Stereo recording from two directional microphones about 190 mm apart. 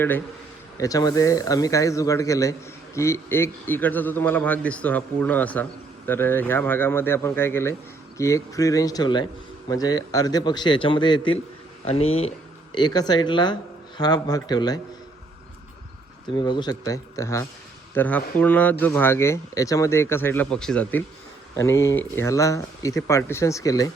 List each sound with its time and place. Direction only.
0.8 s a man's voice: 20° left (ahead or behind)
12.7 s a man's voice: 20° left (ahead or behind)
16.4 s a man's voice: 25° left (ahead or behind)